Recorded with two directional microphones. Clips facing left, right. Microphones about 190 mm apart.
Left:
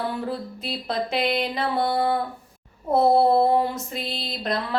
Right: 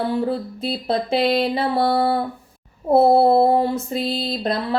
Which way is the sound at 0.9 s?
30° right (ahead or behind).